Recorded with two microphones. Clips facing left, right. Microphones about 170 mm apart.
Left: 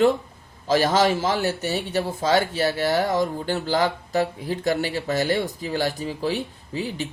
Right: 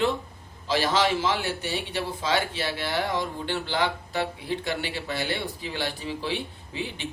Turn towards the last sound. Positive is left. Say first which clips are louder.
# left 5 dB
turn(degrees=40)  # may be behind; listen again after turning